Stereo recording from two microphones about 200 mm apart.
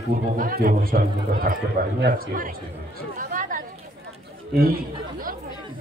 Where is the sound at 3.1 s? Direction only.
40° right (ahead or behind).